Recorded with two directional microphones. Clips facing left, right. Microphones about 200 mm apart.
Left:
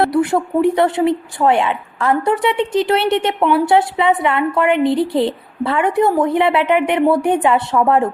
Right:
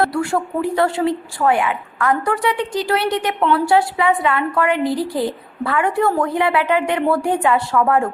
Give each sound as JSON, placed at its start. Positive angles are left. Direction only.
{"t": 0.0, "sound": "a woman's voice", "side_deg": 20}